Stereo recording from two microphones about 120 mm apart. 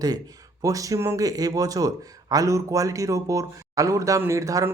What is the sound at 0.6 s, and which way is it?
Speech, 30° right (ahead or behind).